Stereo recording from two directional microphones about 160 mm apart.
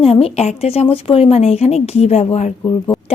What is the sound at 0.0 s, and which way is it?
Speech, 40° left (ahead or behind).